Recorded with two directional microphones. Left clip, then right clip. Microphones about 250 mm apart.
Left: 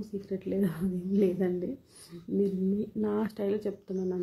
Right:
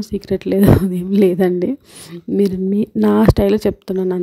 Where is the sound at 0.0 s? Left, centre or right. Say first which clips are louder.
Right 15 dB; right.